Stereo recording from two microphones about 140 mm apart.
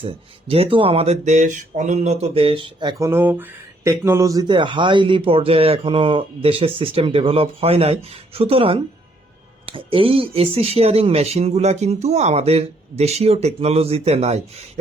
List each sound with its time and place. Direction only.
0.0 s speech: 40° right (ahead or behind)
3.0 s speech: 15° right (ahead or behind); by 14.6 s 50° right (ahead or behind)